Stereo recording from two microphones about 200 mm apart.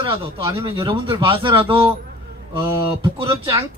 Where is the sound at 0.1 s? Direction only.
25° right (ahead or behind).